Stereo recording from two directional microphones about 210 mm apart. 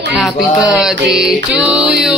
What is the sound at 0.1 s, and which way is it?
Music, centre (ahead or behind).